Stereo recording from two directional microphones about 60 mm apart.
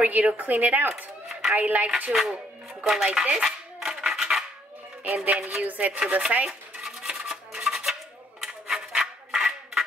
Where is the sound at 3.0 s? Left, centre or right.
Centre.